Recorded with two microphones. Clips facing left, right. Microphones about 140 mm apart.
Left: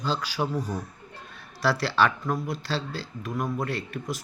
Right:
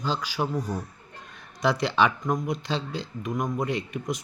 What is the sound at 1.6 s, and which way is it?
Speech, 20° right (ahead or behind).